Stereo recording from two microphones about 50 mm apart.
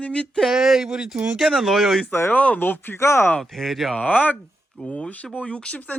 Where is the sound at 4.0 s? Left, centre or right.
Left.